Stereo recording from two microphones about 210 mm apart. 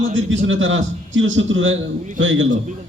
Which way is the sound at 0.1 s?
65° right (ahead or behind).